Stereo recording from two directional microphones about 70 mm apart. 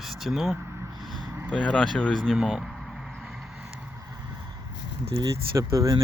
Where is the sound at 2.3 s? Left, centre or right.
Centre.